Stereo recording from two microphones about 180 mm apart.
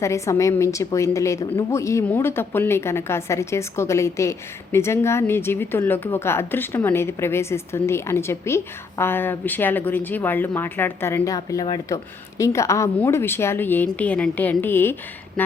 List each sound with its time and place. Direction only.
0.0 s a woman's voice: 15° left (ahead or behind)